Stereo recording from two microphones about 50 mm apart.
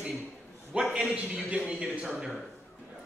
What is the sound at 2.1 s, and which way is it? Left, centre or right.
Speech, centre.